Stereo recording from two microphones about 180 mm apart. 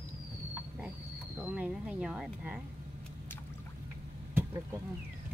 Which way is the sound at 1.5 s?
5° right (ahead or behind).